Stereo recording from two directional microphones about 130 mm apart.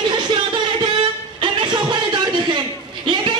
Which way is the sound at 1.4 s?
35° right (ahead or behind).